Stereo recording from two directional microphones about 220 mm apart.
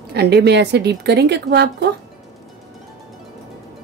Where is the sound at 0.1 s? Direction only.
50° right (ahead or behind).